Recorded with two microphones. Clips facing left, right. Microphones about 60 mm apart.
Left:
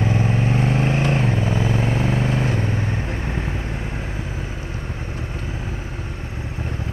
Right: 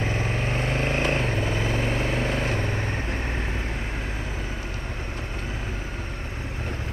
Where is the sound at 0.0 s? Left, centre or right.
Left.